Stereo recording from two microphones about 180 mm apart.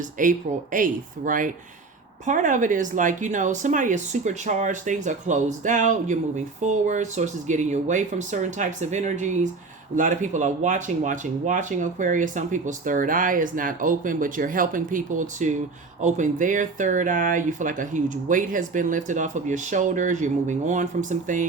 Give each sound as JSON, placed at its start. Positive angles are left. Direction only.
{"t": 0.2, "sound": "speech", "side_deg": -50}